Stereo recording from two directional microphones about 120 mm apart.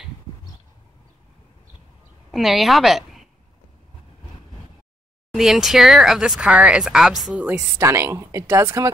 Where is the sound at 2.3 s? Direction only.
Centre (ahead or behind).